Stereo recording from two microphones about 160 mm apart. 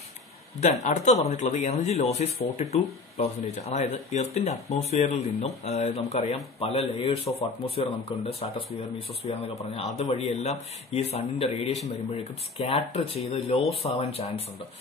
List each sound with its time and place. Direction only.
0.6 s speech: 50° left (ahead or behind)